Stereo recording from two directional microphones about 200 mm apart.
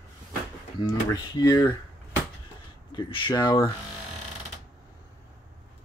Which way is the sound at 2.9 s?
25° left (ahead or behind).